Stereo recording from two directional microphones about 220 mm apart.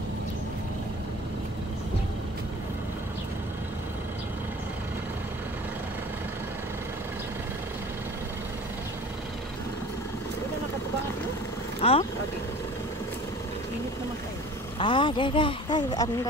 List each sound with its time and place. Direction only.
11.8 s speech: 25° left (ahead or behind)
14.8 s speech: 20° left (ahead or behind)